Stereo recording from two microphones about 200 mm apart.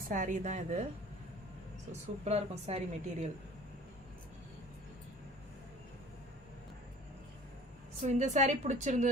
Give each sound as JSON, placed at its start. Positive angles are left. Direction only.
{"t": 0.1, "sound": "speech", "side_deg": -40}
{"t": 1.9, "sound": "speech", "side_deg": -30}
{"t": 8.0, "sound": "speech", "side_deg": -35}